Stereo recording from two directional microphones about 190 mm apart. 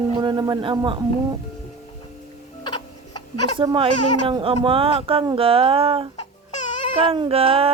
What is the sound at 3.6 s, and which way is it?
Speech, 30° right (ahead or behind).